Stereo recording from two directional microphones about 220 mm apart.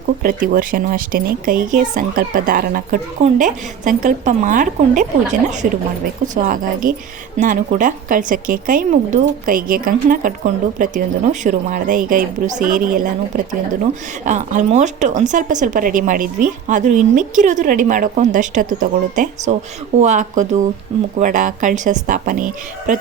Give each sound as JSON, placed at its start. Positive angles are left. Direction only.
{"t": 0.2, "sound": "a woman's voice", "side_deg": -40}